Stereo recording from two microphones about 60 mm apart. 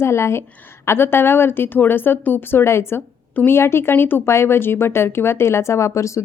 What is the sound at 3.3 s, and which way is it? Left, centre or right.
Speech, left.